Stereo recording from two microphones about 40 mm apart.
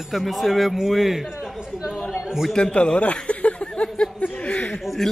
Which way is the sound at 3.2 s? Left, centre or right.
Left.